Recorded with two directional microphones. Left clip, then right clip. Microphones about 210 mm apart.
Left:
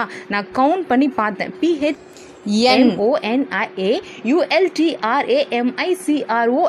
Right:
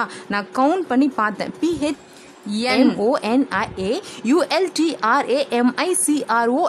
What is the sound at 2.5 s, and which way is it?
Speech, 15° left (ahead or behind).